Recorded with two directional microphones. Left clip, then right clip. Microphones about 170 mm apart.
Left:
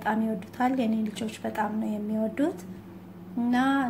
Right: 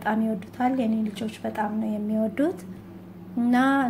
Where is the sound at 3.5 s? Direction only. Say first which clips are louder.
Right 4 dB; 25° right (ahead or behind).